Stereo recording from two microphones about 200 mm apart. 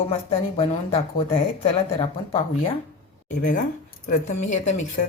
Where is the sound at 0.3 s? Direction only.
30° left (ahead or behind).